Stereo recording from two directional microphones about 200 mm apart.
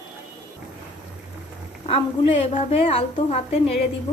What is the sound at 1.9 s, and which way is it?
A woman's voice, 30° left (ahead or behind).